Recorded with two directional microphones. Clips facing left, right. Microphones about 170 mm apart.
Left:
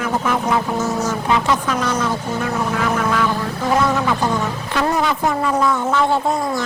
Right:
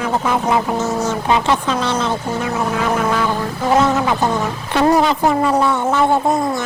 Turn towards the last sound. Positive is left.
turn(degrees=-25)  # may be behind; listen again after turning